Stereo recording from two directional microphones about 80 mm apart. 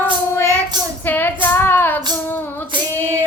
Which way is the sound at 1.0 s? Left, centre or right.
Left.